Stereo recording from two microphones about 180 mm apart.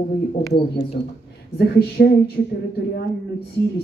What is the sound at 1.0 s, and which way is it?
A man's voice, 60° left (ahead or behind).